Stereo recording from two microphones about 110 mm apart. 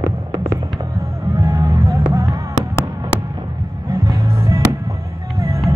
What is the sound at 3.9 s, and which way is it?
Music, 30° right (ahead or behind).